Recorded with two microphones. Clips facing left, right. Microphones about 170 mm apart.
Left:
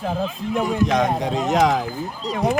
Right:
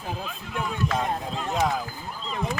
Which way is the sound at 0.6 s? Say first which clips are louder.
Left 7 dB; 90° left.